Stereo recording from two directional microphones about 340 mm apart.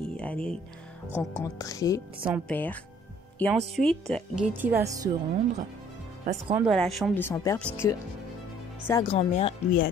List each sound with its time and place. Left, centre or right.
0.2 s speech: centre
1.4 s speech: centre
2.2 s speech: centre
6.2 s speech: centre
6.6 s speech: centre
9.1 s speech: centre